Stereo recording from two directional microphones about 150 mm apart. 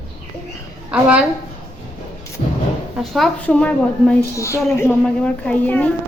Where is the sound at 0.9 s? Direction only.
10° right (ahead or behind).